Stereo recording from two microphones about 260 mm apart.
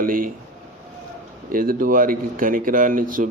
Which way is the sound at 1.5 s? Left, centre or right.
Right.